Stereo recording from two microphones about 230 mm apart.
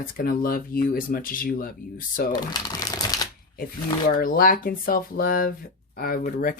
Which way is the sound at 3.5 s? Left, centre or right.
Left.